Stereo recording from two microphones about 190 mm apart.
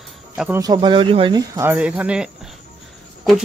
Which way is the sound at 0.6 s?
20° right (ahead or behind).